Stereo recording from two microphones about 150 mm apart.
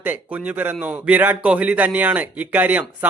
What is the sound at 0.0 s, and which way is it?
A man's voice, 10° right (ahead or behind).